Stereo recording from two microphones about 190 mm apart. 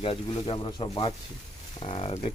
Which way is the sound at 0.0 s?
30° left (ahead or behind).